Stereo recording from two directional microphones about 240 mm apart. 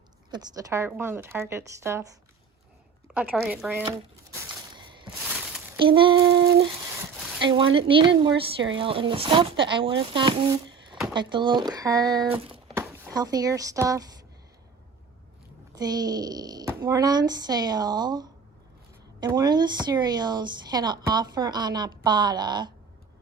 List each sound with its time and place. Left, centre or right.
0.3 s speech: centre
3.2 s speech: centre
4.7 s a sound: centre
5.8 s speech: right
7.8 s speech: right
15.7 s speech: centre